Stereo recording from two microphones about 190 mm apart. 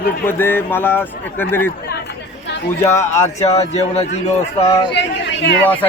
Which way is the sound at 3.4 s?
35° left (ahead or behind).